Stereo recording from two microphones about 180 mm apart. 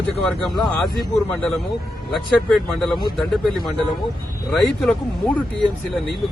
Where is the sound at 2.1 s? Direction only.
Centre (ahead or behind).